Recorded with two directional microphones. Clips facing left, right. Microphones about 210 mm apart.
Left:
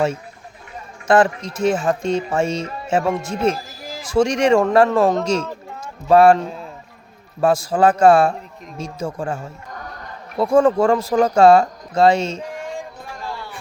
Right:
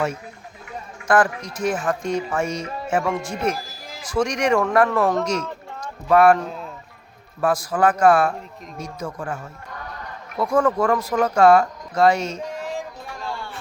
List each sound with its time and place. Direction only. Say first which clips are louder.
1.0 s speech: left 4 dB; 25° left (ahead or behind)
6.4 s speech: left 2 dB; centre (ahead or behind)
7.4 s speech: left 4 dB; 25° left (ahead or behind)